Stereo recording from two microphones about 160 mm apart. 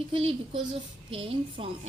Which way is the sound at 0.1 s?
35° right (ahead or behind).